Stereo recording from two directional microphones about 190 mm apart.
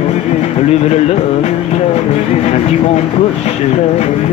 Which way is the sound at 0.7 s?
35° left (ahead or behind).